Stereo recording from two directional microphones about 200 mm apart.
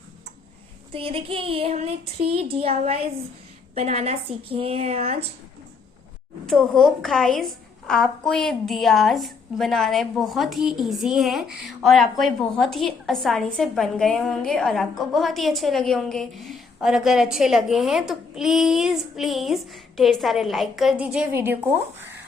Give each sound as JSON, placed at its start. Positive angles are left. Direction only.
{"t": 0.9, "sound": "child singing", "side_deg": -30}
{"t": 3.8, "sound": "a woman's voice", "side_deg": -30}
{"t": 4.4, "sound": "child singing", "side_deg": -30}
{"t": 6.4, "sound": "a woman's voice", "side_deg": 5}